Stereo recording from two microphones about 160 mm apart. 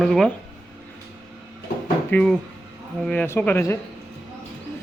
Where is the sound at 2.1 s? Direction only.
5° left (ahead or behind).